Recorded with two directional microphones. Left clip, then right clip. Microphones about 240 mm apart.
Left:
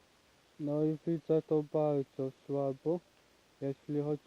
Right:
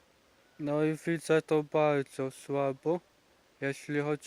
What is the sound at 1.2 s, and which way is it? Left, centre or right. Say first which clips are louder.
Speech: right 4 dB; right.